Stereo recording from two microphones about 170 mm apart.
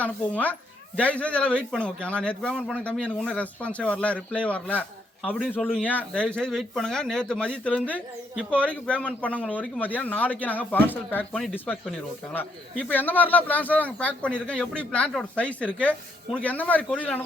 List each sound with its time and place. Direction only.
0.0 s speech: 10° left (ahead or behind)
5.3 s speech: 5° right (ahead or behind)